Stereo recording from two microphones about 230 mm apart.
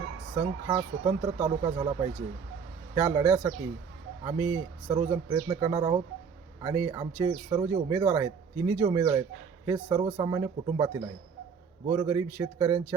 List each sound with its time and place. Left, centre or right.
0.3 s a man's voice: centre